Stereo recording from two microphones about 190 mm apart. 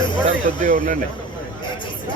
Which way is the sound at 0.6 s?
45° right (ahead or behind).